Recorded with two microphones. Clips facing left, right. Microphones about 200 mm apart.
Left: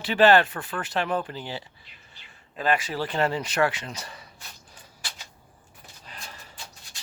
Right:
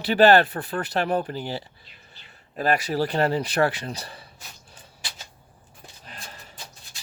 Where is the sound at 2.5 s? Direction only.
40° right (ahead or behind).